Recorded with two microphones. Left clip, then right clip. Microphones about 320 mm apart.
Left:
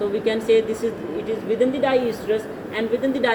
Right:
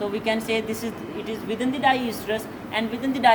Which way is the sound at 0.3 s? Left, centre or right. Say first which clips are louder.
Left 7 dB; right.